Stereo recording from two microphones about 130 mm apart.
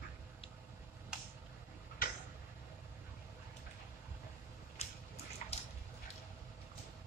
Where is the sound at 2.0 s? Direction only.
90° left.